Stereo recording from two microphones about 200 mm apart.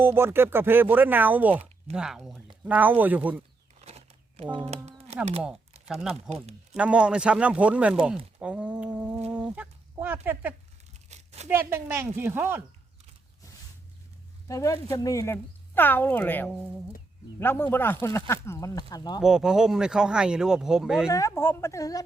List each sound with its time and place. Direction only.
0.0 s speech: 10° right (ahead or behind)
3.8 s a sound: 30° right (ahead or behind)
4.5 s speech: 30° right (ahead or behind)
5.9 s speech: centre (ahead or behind)
8.4 s a sound: 5° right (ahead or behind)
11.1 s a sound: 35° right (ahead or behind)
11.4 s speech: 10° right (ahead or behind)
14.4 s speech: 15° left (ahead or behind)
19.2 s speech: centre (ahead or behind)
21.1 s speech: 15° left (ahead or behind)